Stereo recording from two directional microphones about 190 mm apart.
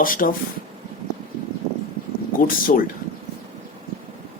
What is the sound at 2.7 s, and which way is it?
Speech, 45° left (ahead or behind).